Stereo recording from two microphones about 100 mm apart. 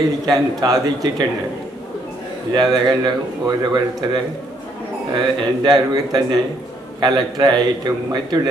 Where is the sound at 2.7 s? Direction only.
45° right (ahead or behind).